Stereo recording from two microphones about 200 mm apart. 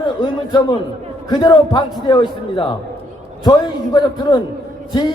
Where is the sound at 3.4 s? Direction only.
20° left (ahead or behind).